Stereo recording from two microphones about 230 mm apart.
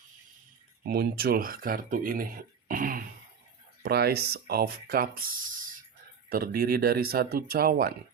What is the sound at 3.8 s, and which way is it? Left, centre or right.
Speech, right.